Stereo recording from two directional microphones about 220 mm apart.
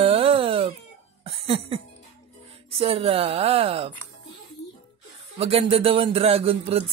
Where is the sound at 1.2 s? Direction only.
25° right (ahead or behind).